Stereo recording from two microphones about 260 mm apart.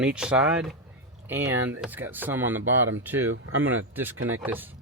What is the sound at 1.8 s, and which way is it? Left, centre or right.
Speech, centre.